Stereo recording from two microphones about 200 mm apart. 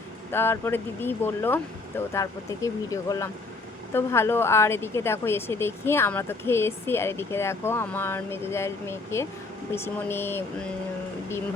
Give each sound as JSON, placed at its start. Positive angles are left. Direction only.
{"t": 0.3, "sound": "a woman's voice", "side_deg": 10}